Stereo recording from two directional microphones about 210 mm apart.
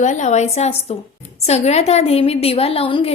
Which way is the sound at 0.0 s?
35° left (ahead or behind).